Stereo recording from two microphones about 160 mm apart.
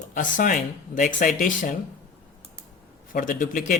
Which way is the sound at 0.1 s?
55° left (ahead or behind).